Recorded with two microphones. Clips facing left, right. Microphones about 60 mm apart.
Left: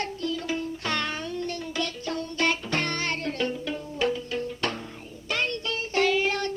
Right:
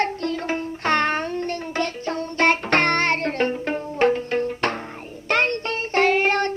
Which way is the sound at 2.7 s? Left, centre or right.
Right.